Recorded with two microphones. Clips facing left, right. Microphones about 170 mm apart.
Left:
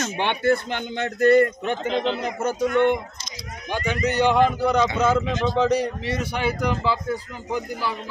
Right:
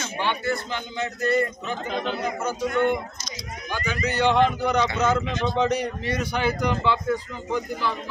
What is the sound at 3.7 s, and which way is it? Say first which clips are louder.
Speech: left 4 dB; 25° left (ahead or behind).